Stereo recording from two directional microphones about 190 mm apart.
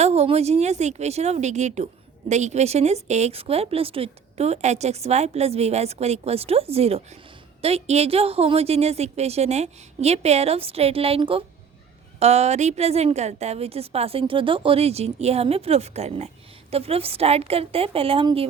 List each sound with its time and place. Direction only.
0.0 s a woman's voice: 35° right (ahead or behind)